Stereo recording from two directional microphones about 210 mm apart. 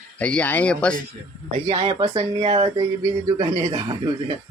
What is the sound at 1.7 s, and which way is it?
Speech, 25° right (ahead or behind).